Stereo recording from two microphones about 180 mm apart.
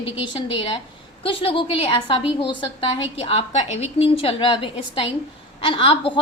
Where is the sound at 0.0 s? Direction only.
30° left (ahead or behind).